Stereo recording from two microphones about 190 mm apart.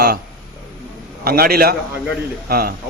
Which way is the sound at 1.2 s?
55° right (ahead or behind).